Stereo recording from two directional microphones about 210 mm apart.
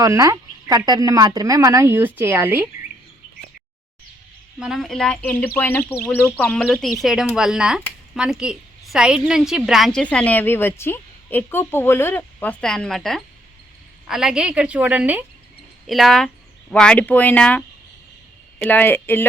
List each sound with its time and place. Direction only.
0.0 s speech: 15° right (ahead or behind)
4.6 s a woman's voice: centre (ahead or behind)
18.6 s speech: 10° left (ahead or behind)